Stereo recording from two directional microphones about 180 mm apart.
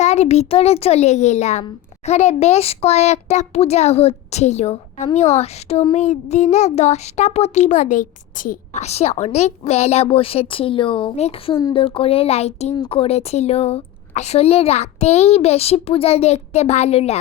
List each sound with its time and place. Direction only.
0.0 s a child's voice: 35° left (ahead or behind)